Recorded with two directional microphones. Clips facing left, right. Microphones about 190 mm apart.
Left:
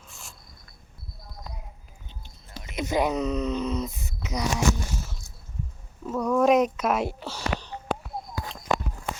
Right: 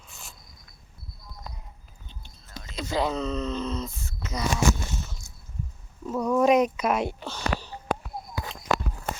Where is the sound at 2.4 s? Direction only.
20° left (ahead or behind).